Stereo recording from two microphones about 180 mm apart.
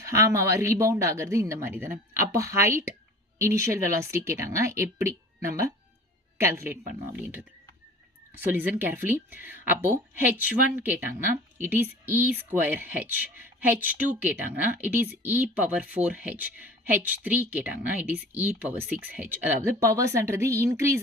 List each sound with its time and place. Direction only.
0.0 s speech: 15° right (ahead or behind)
8.4 s speech: 10° right (ahead or behind)